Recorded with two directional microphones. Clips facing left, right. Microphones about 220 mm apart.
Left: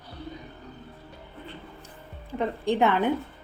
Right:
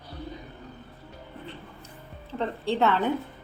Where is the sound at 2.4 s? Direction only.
15° left (ahead or behind).